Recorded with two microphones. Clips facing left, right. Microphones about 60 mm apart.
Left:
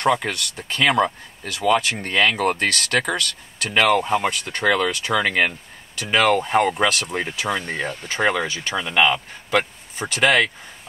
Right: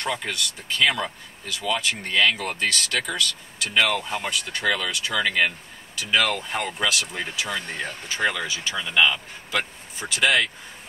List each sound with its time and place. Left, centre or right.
0.0 s speech: left